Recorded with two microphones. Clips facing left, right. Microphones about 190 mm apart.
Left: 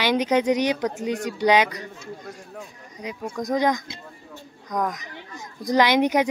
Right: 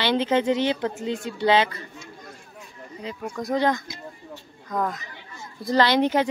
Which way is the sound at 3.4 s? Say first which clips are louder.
Left 1 dB; 15° left (ahead or behind).